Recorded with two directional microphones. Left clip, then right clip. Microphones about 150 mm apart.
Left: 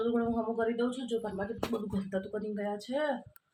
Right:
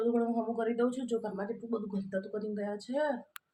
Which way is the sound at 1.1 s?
25° left (ahead or behind).